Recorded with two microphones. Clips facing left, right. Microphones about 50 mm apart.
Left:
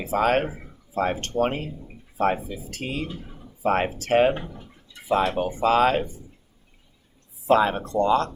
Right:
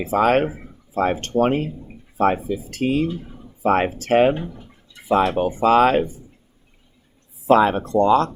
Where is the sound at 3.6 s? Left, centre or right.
Right.